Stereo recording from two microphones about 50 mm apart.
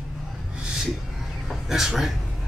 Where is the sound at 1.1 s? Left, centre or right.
Centre.